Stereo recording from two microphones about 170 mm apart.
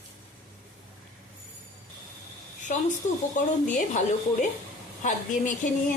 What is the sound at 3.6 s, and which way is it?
A woman's voice, 45° left (ahead or behind).